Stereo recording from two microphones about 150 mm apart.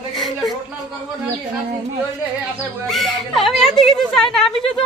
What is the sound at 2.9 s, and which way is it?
Speech, centre (ahead or behind).